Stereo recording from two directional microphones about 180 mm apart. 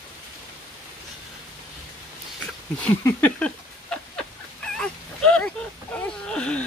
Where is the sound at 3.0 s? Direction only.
10° left (ahead or behind).